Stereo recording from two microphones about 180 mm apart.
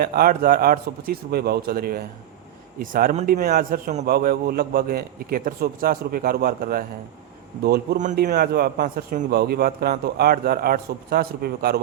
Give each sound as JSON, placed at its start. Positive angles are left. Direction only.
{"t": 0.0, "sound": "a man's voice", "side_deg": -55}